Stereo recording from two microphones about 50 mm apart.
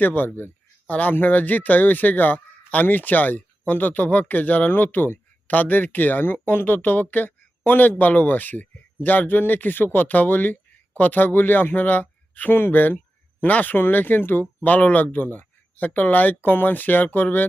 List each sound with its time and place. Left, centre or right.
0.0 s speech: left
12.5 s speech: left
14.6 s speech: left